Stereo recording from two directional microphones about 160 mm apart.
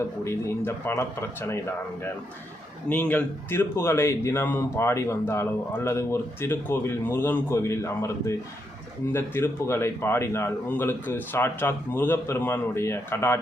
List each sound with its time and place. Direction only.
0.3 s a man's voice: 15° left (ahead or behind)
2.9 s a man's voice: 10° left (ahead or behind)